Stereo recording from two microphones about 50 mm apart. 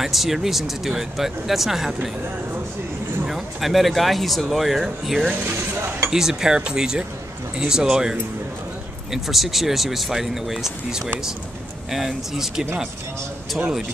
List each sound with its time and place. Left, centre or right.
0.0 s speech: centre
3.3 s speech: centre
5.3 s speech: right
6.0 s speech: centre
9.1 s speech: centre